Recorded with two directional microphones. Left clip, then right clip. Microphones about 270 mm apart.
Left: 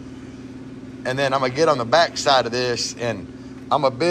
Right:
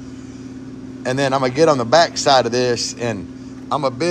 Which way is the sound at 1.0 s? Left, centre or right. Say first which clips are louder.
Right 2 dB; centre.